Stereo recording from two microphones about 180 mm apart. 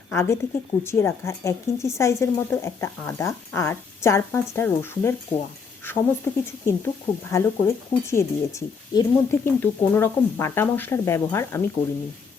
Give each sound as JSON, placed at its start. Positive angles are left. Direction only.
{"t": 0.1, "sound": "speech", "side_deg": 15}